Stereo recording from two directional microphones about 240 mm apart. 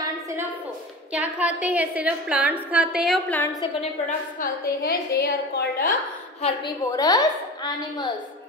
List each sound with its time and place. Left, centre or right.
1.2 s a woman's voice: centre
3.3 s a woman's voice: centre
3.8 s a woman's voice: left
6.4 s a woman's voice: centre